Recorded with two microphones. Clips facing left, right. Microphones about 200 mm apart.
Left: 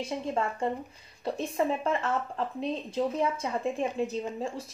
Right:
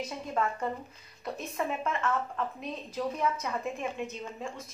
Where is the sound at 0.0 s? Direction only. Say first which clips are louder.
Left 2 dB; 30° left (ahead or behind).